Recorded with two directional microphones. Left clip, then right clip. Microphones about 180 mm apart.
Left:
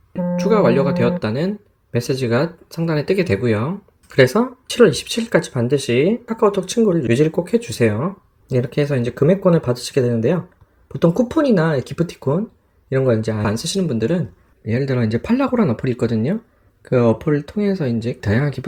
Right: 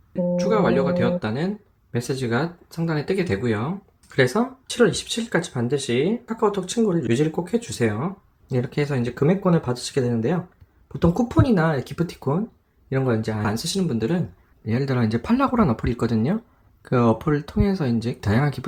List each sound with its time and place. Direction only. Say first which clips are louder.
0.3 s speech: left 5 dB; 30° left (ahead or behind)
14.6 s speech: left 4 dB; 5° left (ahead or behind)